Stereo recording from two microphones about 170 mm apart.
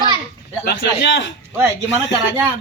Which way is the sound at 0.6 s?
75° left (ahead or behind).